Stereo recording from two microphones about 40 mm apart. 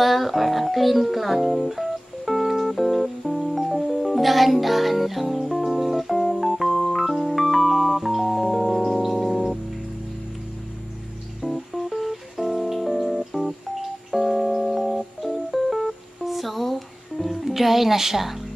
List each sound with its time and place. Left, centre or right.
0.0 s music: centre
11.4 s music: centre